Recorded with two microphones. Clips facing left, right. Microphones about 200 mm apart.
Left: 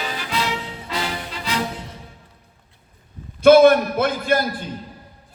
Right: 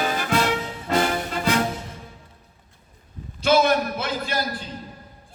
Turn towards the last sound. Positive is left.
turn(degrees=55)  # may be behind; listen again after turning